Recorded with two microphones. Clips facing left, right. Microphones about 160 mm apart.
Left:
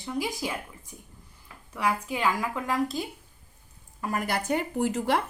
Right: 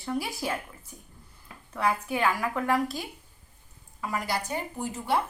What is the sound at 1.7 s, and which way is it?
A woman's voice, 10° left (ahead or behind).